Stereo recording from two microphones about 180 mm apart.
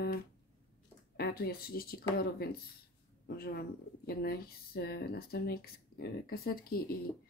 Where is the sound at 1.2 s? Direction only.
60° left (ahead or behind).